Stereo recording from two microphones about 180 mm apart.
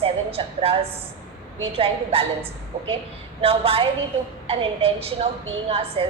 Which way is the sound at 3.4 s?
30° right (ahead or behind).